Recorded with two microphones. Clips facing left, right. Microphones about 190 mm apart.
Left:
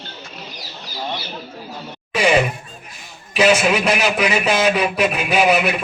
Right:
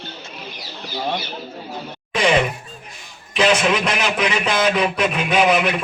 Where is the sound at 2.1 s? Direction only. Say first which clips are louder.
Left 1 dB; 10° left (ahead or behind).